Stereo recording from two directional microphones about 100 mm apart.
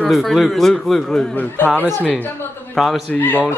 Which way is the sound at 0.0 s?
Centre (ahead or behind).